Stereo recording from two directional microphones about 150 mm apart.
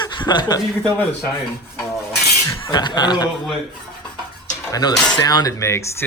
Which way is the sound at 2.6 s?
30° left (ahead or behind).